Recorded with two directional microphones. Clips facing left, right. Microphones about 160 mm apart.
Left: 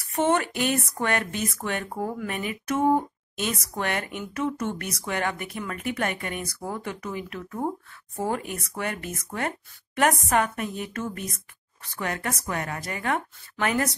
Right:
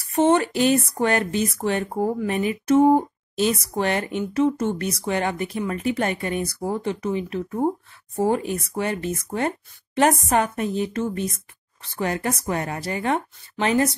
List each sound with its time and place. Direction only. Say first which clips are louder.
0.1 s a woman's voice: right 5 dB; 30° right (ahead or behind)